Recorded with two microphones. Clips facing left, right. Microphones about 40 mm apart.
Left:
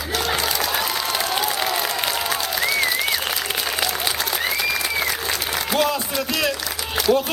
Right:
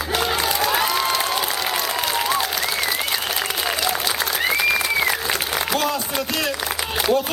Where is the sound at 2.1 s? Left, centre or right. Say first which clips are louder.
Right 2 dB; centre.